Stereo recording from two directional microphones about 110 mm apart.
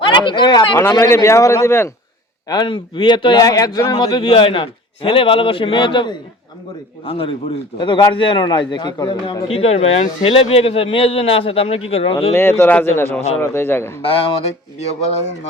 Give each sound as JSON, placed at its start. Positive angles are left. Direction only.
{"t": 0.0, "sound": "speech", "side_deg": 45}
{"t": 0.8, "sound": "speech", "side_deg": 25}
{"t": 2.5, "sound": "speech", "side_deg": 45}
{"t": 3.9, "sound": "a man's voice", "side_deg": 55}
{"t": 7.0, "sound": "a man's voice", "side_deg": 60}
{"t": 9.5, "sound": "a man's voice", "side_deg": 65}
{"t": 12.3, "sound": "speech", "side_deg": 20}
{"t": 14.0, "sound": "speech", "side_deg": 60}